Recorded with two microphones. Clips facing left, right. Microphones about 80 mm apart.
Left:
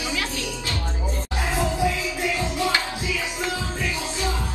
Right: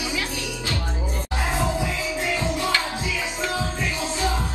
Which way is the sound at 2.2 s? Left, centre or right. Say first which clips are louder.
Left 1 dB; right.